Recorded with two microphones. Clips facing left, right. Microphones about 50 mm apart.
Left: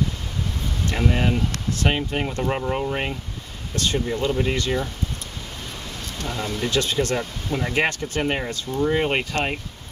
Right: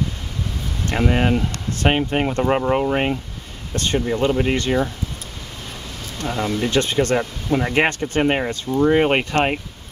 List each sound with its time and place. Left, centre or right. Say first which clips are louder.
0.9 s speech: right 4 dB; right
6.2 s speech: right 5 dB; centre
6.8 s speech: right 5 dB; right